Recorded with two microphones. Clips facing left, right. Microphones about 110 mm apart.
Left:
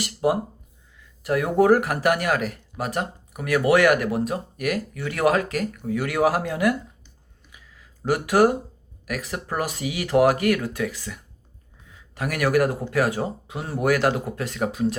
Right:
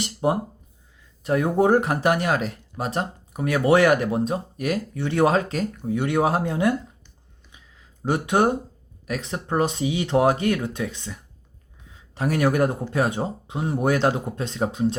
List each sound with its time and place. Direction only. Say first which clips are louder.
0.0 s speech: left 1 dB; 25° right (ahead or behind)
7.5 s a sound: left 2 dB; 25° right (ahead or behind)
9.0 s speech: right 2 dB; 25° right (ahead or behind)